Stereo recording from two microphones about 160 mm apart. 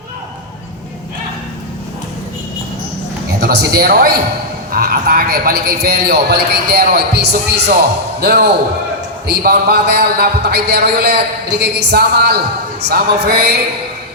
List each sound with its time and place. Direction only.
3.4 s a man's voice: 85° right
8.2 s a man's voice: 75° right (ahead or behind)
11.6 s a woman's voice: 90° right